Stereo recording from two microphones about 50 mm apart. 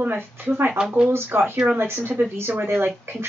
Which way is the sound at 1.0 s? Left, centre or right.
Right.